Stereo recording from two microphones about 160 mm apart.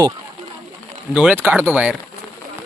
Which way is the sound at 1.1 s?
10° right (ahead or behind).